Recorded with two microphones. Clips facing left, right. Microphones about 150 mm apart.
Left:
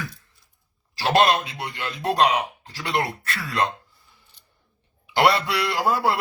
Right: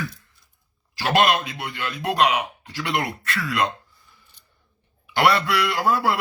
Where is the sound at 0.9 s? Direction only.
30° left (ahead or behind).